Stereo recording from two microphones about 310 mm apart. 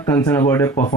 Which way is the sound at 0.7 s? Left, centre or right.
Left.